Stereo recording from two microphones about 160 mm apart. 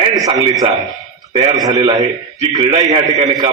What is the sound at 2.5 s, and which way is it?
Speech, 40° right (ahead or behind).